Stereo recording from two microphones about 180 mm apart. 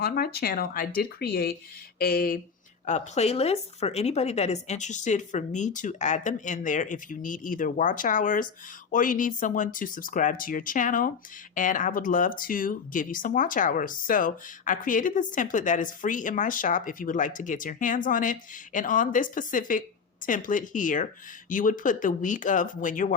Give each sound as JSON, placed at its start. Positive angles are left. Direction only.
{"t": 0.0, "sound": "speech", "side_deg": 55}
{"t": 2.8, "sound": "speech", "side_deg": 40}